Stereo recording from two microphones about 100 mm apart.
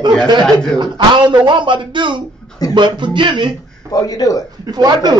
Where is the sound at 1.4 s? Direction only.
50° right (ahead or behind).